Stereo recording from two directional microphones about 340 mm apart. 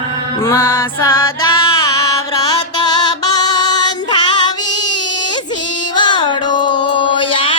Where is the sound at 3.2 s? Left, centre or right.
Centre.